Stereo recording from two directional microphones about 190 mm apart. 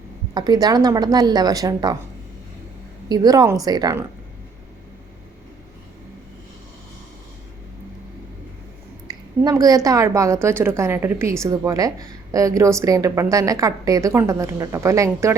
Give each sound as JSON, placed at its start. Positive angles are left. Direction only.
{"t": 0.3, "sound": "a woman's voice", "side_deg": -20}
{"t": 3.1, "sound": "a woman's voice", "side_deg": -20}
{"t": 9.0, "sound": "a woman's voice", "side_deg": -20}